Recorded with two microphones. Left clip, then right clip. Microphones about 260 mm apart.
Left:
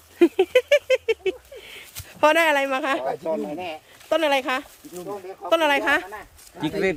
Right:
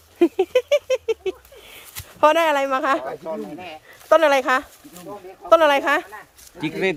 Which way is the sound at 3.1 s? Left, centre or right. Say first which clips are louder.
Left 3 dB; left.